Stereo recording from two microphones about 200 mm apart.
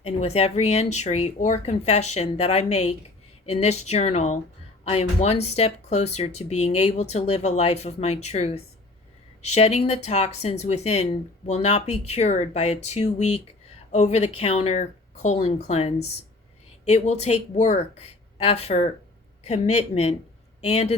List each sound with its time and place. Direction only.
0.3 s speech: 30° left (ahead or behind)